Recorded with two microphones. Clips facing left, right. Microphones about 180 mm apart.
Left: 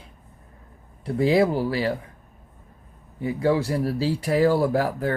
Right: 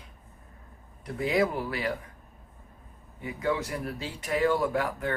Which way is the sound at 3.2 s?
30° left (ahead or behind).